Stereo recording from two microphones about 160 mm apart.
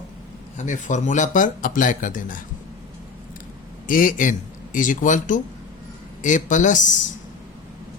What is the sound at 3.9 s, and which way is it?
A man's voice, 55° left (ahead or behind).